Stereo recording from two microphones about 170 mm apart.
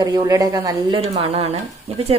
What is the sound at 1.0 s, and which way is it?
Speech, 35° right (ahead or behind).